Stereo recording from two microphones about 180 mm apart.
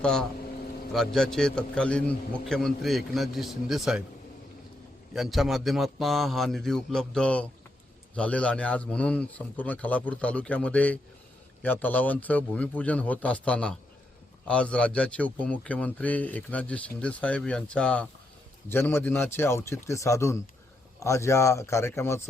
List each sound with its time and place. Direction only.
0.0 s a man's voice: 5° left (ahead or behind)
5.1 s a man's voice: centre (ahead or behind); by 22.2 s 15° left (ahead or behind)